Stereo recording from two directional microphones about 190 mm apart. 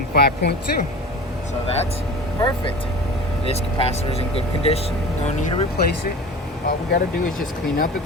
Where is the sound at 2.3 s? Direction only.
25° left (ahead or behind).